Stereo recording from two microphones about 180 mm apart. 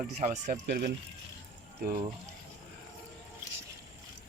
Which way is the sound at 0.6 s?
65° right (ahead or behind).